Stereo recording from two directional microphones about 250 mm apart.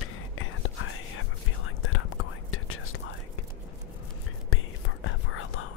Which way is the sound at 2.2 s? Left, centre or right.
Left.